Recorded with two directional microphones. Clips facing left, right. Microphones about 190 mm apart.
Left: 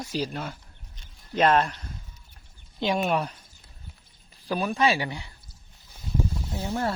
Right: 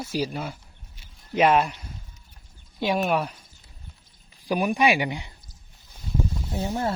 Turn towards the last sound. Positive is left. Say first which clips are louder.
# right 2 dB
turn(degrees=-20)  # may be behind; listen again after turning